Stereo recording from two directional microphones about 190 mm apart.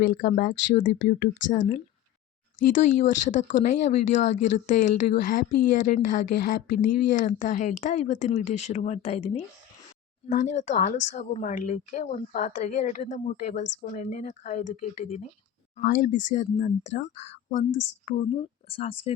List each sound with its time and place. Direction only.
0.0 s speech: 50° left (ahead or behind); by 19.1 s 30° left (ahead or behind)